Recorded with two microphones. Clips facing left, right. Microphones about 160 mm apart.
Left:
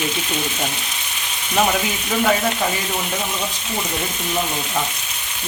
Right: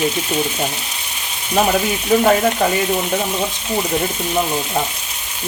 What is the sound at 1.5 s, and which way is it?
Speech, 40° right (ahead or behind).